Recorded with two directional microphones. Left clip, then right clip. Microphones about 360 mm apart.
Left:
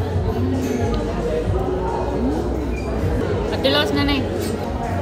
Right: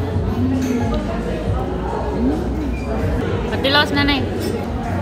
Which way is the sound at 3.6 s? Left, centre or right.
Centre.